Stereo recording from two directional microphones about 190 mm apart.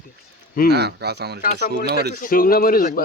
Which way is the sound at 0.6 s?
60° right (ahead or behind).